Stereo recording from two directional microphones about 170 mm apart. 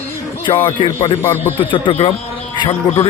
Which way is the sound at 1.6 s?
30° left (ahead or behind).